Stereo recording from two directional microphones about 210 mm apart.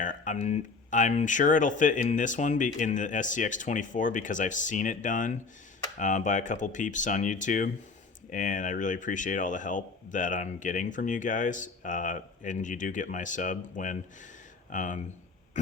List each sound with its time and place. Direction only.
0.0 s speech: 40° left (ahead or behind)